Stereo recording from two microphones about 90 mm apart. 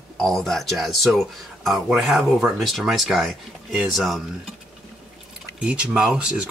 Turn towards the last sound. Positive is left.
turn(degrees=-10)  # may be behind; listen again after turning